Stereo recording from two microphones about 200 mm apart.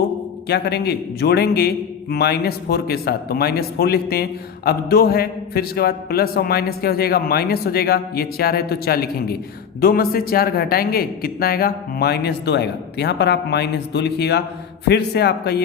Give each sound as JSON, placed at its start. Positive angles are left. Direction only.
{"t": 0.4, "sound": "a man's voice", "side_deg": 55}